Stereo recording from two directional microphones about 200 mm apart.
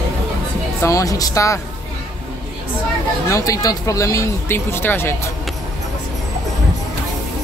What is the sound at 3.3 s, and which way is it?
Speech, 15° left (ahead or behind).